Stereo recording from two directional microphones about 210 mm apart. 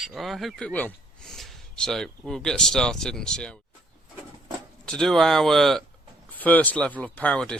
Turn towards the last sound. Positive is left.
turn(degrees=5)  # may be behind; listen again after turning